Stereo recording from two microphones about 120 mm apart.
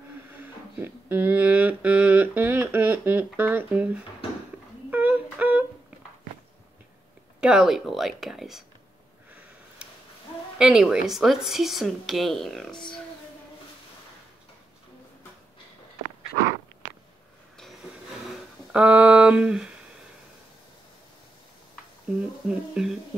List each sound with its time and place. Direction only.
0.3 s a sound: 15° right (ahead or behind)
4.9 s humming: 15° right (ahead or behind)
7.3 s speech: 5° right (ahead or behind)
10.6 s speech: 10° right (ahead or behind)
18.7 s a sound: 10° right (ahead or behind)
22.5 s speech: 5° right (ahead or behind)